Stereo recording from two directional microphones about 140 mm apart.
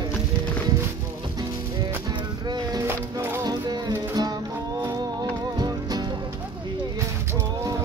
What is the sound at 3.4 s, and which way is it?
Music, 30° right (ahead or behind).